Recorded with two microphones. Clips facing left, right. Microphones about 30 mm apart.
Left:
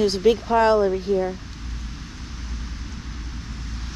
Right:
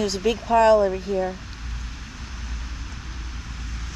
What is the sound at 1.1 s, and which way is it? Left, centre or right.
Speech, right.